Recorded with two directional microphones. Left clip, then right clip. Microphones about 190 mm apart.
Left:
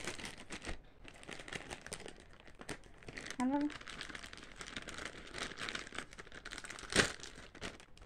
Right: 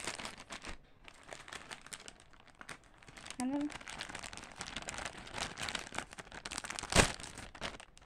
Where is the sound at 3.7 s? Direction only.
45° right (ahead or behind).